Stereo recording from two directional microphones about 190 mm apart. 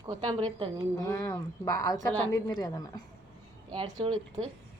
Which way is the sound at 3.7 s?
25° right (ahead or behind).